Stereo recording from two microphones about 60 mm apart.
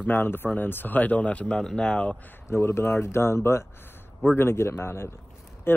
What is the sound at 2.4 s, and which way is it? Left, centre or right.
Speech, left.